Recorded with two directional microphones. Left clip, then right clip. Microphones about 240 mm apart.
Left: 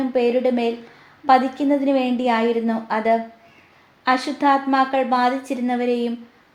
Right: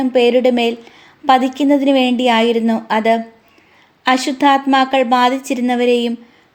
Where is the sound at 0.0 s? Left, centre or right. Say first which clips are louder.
Right 7 dB; right.